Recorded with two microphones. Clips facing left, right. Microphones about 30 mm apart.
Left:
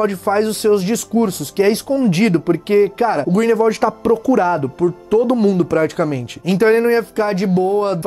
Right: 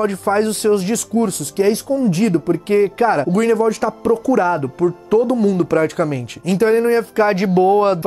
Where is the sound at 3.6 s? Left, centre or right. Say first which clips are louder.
Left 2 dB; left.